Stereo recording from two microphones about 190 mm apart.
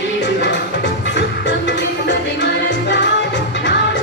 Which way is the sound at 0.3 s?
65° left (ahead or behind).